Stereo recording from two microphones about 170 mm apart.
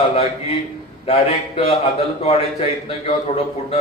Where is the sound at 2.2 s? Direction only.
35° left (ahead or behind).